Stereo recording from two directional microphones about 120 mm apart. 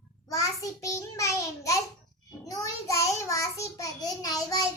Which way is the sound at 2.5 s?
30° left (ahead or behind).